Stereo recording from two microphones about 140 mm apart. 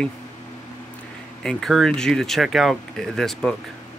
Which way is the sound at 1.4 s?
5° left (ahead or behind).